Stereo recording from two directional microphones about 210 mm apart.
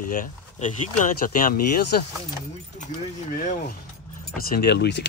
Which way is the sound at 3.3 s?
45° left (ahead or behind).